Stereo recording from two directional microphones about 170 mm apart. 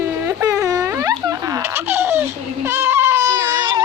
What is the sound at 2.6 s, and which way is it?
Baby cry, 15° right (ahead or behind).